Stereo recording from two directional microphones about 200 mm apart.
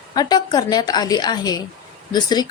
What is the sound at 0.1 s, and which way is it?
Speech, 20° left (ahead or behind).